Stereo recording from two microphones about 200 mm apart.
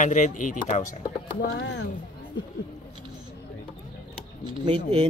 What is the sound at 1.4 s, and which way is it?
Speech, 60° left (ahead or behind).